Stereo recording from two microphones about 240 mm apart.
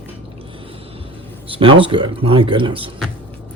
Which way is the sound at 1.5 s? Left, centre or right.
Right.